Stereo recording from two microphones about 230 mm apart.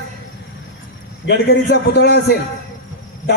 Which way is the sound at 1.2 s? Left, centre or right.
Left.